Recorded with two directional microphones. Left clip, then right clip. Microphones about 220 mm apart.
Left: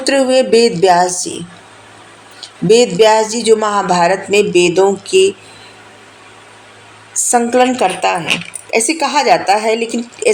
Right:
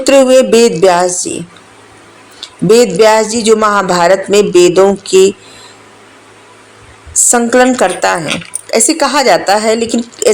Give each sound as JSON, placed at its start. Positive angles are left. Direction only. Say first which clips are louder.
{"t": 0.0, "sound": "speech", "louder": "right 6 dB", "side_deg": -25}
{"t": 2.4, "sound": "speech", "louder": "right 2 dB", "side_deg": -25}
{"t": 7.1, "sound": "a woman's voice", "louder": "right 3 dB", "side_deg": -25}